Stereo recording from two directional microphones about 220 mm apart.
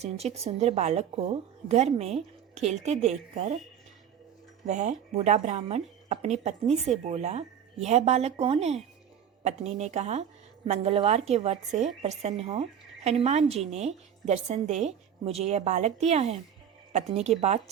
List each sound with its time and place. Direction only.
0.0 s a woman's voice: 30° right (ahead or behind)
4.6 s a woman's voice: 35° right (ahead or behind)